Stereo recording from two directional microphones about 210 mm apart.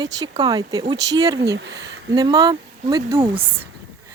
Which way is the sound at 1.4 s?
50° right (ahead or behind).